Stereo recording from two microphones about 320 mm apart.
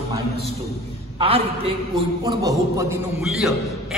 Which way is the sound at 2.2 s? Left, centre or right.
Centre.